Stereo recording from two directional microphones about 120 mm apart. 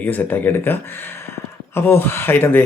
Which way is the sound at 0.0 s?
15° left (ahead or behind).